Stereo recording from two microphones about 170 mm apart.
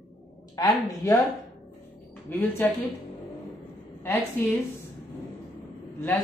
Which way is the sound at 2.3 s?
10° left (ahead or behind).